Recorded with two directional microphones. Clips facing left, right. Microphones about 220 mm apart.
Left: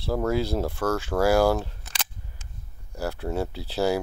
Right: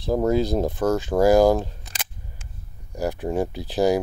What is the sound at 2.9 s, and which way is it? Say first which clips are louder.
Speech: right 4 dB; 15° right (ahead or behind).